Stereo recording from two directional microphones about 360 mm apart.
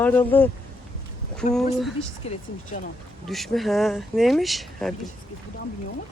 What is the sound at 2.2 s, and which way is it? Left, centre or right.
Speech, centre.